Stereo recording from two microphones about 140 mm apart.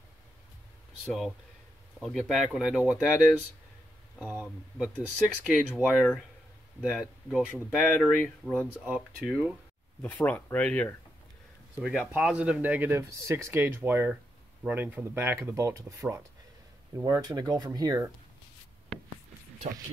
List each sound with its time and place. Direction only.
1.0 s speech: centre (ahead or behind)
4.3 s speech: 5° right (ahead or behind)
10.0 s speech: 10° left (ahead or behind)
11.8 s speech: 5° right (ahead or behind); by 18.1 s 25° right (ahead or behind)